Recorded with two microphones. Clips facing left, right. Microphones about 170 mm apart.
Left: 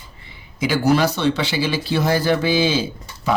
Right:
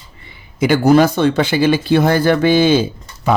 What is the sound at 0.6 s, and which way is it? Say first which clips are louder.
A man's voice: right 6 dB; 55° right (ahead or behind).